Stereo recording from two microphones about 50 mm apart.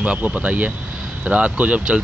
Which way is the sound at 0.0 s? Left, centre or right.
Right.